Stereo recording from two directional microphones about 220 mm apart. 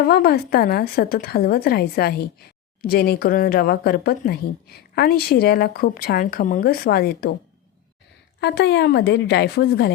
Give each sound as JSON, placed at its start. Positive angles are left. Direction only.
{"t": 0.0, "sound": "speech", "side_deg": 45}
{"t": 8.4, "sound": "speech", "side_deg": 50}